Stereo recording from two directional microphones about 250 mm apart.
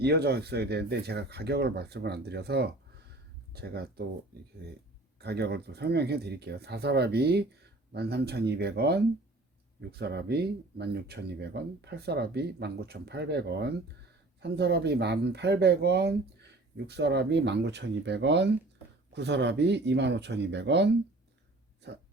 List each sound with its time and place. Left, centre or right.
0.0 s speech: right
5.2 s speech: right